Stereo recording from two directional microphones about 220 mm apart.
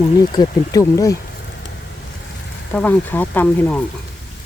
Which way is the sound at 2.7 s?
5° left (ahead or behind).